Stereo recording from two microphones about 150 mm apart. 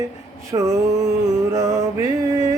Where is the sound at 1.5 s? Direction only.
20° right (ahead or behind).